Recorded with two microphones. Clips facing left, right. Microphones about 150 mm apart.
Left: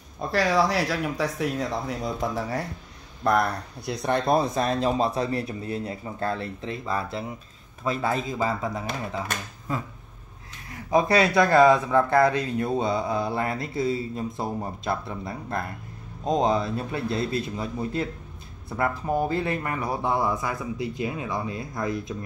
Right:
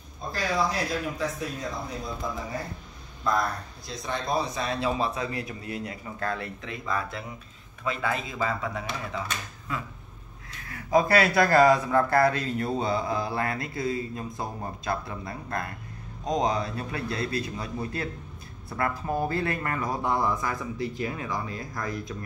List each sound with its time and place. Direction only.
0.3 s speech: 90° left; by 9.8 s 40° left (ahead or behind)
10.9 s speech: 25° left (ahead or behind)